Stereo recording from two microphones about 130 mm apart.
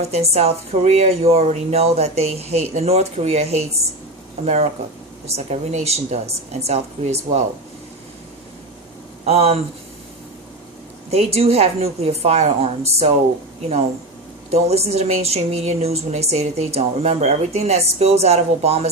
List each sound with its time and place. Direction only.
0.0 s a woman's voice: 55° right (ahead or behind)
9.2 s a woman's voice: 50° right (ahead or behind)
11.1 s a woman's voice: 50° right (ahead or behind)